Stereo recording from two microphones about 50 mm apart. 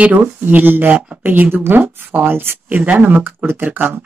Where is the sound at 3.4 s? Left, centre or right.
Right.